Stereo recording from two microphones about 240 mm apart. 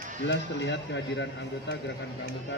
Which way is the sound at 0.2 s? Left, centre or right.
Left.